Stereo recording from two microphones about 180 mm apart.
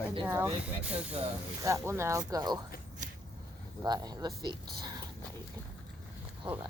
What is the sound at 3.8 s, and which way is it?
Speech, 20° right (ahead or behind).